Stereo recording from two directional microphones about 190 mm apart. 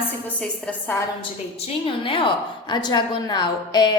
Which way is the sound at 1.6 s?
25° left (ahead or behind).